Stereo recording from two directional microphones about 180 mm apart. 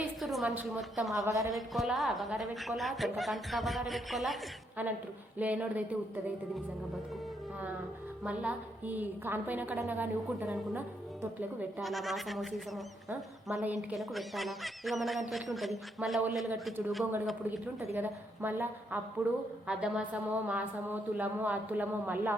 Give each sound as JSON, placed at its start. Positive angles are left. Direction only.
{"t": 0.2, "sound": "a woman's voice", "side_deg": 0}
{"t": 1.2, "sound": "a woman's voice", "side_deg": -20}
{"t": 1.5, "sound": "a woman's voice", "side_deg": 0}
{"t": 8.2, "sound": "a woman's voice", "side_deg": -5}
{"t": 17.9, "sound": "a woman's voice", "side_deg": -10}